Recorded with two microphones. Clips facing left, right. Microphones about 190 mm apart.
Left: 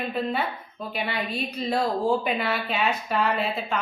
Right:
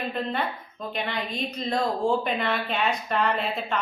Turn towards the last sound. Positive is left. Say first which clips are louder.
# left 1 dB
turn(degrees=5)  # may be behind; listen again after turning